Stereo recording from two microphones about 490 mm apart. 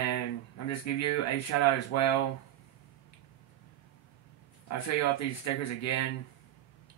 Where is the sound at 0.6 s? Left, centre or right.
Left.